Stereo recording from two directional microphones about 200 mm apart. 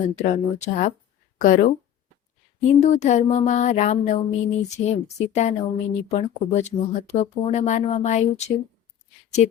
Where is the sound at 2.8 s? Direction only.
35° left (ahead or behind).